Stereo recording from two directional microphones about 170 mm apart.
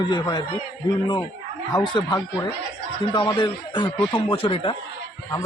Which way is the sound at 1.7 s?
25° left (ahead or behind).